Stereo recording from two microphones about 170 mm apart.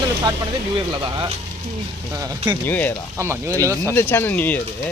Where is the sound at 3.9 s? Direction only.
15° left (ahead or behind).